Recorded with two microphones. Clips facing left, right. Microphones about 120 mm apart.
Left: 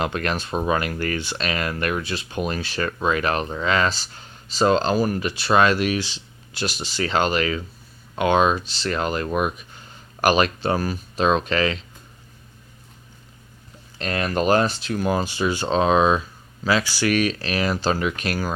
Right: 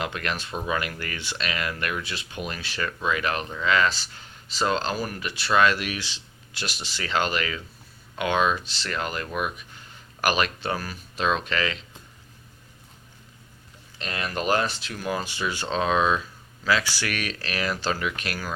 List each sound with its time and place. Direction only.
0.0 s speech: 40° left (ahead or behind)
14.0 s speech: 45° left (ahead or behind)